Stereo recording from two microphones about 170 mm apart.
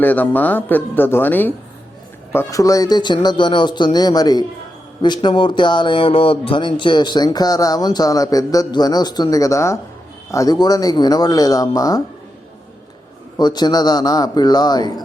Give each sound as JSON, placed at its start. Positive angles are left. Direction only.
{"t": 0.0, "sound": "speech", "side_deg": 10}
{"t": 13.4, "sound": "speech", "side_deg": 25}